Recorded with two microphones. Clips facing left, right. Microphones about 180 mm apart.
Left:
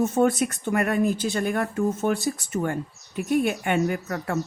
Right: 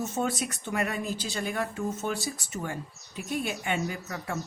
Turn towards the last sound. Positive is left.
turn(degrees=55)  # may be behind; listen again after turning